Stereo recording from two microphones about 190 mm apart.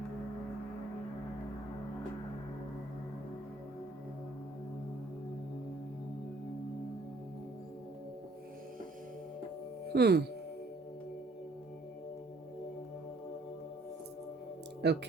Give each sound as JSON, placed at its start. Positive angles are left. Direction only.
{"t": 9.9, "sound": "speech", "side_deg": -55}
{"t": 14.8, "sound": "speech", "side_deg": -65}